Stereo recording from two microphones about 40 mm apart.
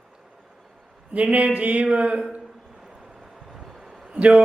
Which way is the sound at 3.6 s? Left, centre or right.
Centre.